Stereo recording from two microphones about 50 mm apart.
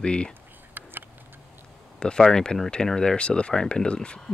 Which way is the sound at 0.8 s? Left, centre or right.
Right.